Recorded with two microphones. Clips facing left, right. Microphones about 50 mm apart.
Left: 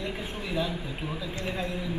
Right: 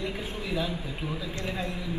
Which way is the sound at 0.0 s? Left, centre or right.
Centre.